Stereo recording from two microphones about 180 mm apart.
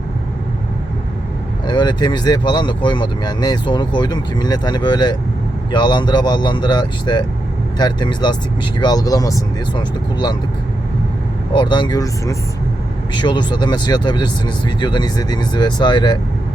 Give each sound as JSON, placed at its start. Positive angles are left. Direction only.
{"t": 1.6, "sound": "speech", "side_deg": 25}
{"t": 11.5, "sound": "speech", "side_deg": 25}